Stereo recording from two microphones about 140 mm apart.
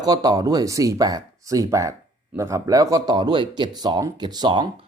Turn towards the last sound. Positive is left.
turn(degrees=-30)  # may be behind; listen again after turning